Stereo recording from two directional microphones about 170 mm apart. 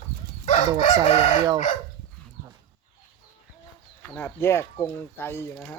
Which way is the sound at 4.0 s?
15° left (ahead or behind).